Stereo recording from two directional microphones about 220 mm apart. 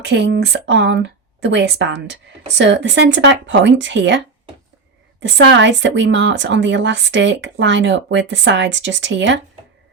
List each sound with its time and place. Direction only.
0.0 s speech: 55° right (ahead or behind)
5.2 s speech: 55° right (ahead or behind)